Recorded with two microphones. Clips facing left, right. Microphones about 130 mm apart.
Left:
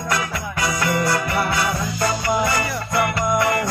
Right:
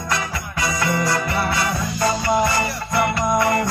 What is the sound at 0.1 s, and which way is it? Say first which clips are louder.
Music: left 1 dB; 25° right (ahead or behind).